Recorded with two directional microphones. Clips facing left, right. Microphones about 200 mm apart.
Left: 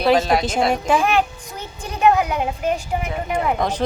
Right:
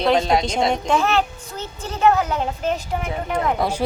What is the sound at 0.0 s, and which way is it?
Speech, 5° left (ahead or behind).